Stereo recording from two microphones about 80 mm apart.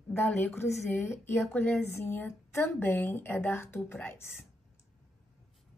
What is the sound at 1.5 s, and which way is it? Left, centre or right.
A woman's voice, left.